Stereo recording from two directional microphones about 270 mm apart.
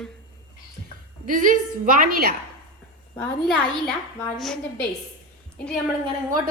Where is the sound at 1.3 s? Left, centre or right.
Right.